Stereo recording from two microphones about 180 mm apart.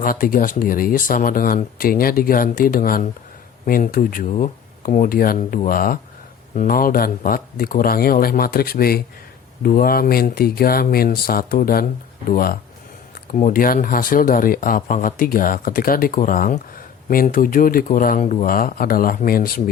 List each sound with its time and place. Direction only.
0.0 s speech: 50° left (ahead or behind)